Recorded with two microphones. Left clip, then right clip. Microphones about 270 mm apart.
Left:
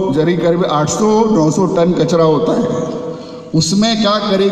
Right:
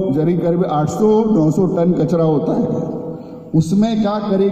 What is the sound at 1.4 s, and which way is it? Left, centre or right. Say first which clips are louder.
Speech: left 3 dB; left.